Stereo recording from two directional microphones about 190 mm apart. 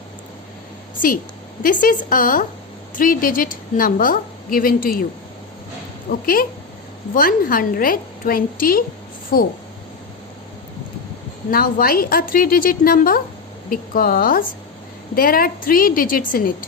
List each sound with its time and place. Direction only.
1.6 s a woman's voice: 45° left (ahead or behind)
6.1 s a woman's voice: 50° left (ahead or behind)
11.5 s a woman's voice: 50° left (ahead or behind)